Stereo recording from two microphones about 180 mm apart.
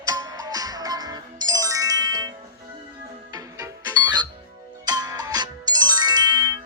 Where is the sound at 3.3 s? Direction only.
20° right (ahead or behind).